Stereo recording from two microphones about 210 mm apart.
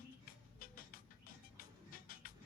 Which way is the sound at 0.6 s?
45° left (ahead or behind).